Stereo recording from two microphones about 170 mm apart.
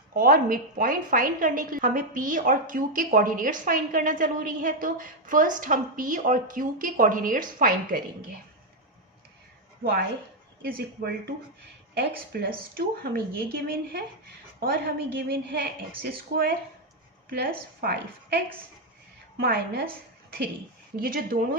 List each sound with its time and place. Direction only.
0.1 s a woman's voice: 55° right (ahead or behind)
10.6 s a woman's voice: 60° right (ahead or behind)
19.4 s speech: 65° right (ahead or behind)
20.9 s speech: 60° right (ahead or behind)